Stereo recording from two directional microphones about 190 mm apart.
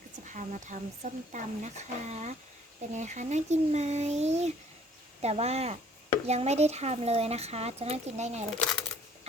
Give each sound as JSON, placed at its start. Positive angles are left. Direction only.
{"t": 0.3, "sound": "speech", "side_deg": -40}